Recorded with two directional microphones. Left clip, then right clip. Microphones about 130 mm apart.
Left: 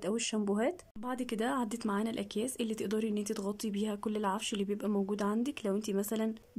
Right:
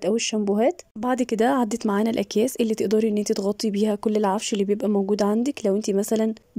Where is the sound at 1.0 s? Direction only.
55° right (ahead or behind).